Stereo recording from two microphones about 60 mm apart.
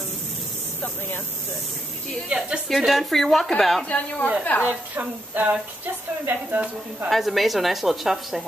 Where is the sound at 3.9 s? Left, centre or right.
Left.